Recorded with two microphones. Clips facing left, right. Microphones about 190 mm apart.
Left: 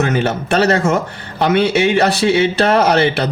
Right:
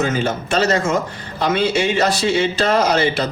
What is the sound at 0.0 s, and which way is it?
Speech, 60° left (ahead or behind).